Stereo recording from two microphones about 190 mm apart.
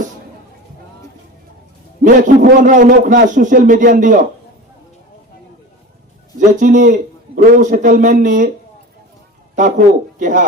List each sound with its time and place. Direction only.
2.2 s speech: 45° right (ahead or behind)
6.6 s speech: 40° right (ahead or behind)
9.6 s speech: 45° right (ahead or behind)